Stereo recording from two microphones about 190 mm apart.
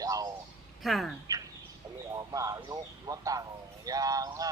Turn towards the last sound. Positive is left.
turn(degrees=-20)  # may be behind; listen again after turning